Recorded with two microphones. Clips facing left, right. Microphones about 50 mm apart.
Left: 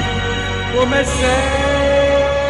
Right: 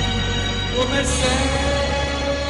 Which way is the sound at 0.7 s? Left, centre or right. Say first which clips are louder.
Left 6 dB; left.